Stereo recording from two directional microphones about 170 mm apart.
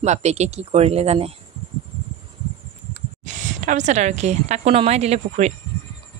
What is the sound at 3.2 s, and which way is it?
A woman's voice, 45° right (ahead or behind).